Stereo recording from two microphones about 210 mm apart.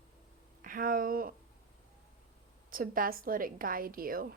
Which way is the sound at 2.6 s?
40° right (ahead or behind).